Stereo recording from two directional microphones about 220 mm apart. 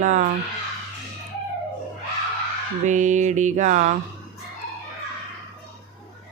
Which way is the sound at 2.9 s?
35° right (ahead or behind).